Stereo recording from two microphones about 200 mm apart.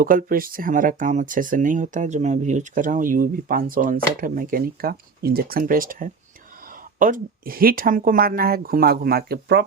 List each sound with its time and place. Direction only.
0.0 s speech: 45° right (ahead or behind)